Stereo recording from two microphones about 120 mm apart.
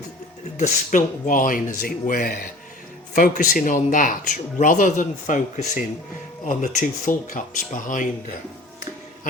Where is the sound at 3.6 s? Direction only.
90° left.